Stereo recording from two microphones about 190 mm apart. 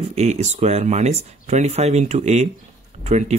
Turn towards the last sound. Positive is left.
turn(degrees=-35)  # may be behind; listen again after turning